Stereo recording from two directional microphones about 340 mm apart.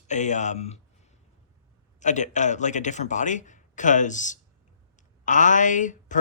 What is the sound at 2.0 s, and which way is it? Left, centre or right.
Speech, left.